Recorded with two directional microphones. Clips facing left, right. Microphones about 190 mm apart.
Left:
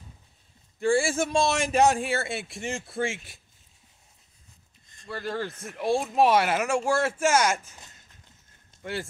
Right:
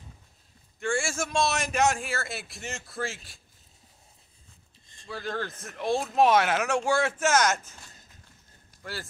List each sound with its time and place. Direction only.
0.7 s a man's voice: 35° left (ahead or behind)
5.0 s speech: 5° left (ahead or behind)